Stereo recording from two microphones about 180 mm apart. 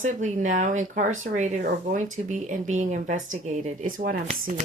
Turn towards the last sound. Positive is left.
turn(degrees=-50)  # may be behind; listen again after turning